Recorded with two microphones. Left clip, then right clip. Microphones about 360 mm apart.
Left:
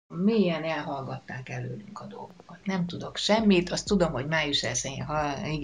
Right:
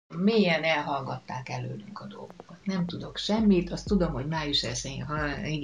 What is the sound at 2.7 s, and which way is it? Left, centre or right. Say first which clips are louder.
A woman's voice: left 2 dB; left.